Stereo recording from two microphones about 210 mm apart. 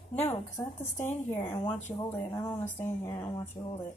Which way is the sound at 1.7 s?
35° left (ahead or behind).